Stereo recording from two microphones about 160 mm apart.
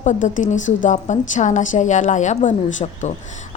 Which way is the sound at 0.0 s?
50° left (ahead or behind).